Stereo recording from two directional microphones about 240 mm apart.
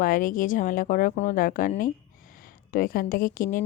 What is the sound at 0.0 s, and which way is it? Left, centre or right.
A woman's voice, left.